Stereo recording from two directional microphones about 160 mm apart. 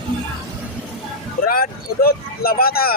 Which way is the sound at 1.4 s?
65° left (ahead or behind).